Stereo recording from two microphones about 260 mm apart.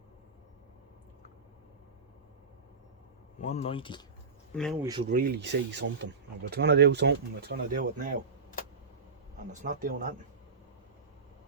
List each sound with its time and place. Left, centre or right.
3.4 s speech: left
4.5 s speech: centre
4.8 s speech: centre
5.0 s speech: right
9.5 s speech: right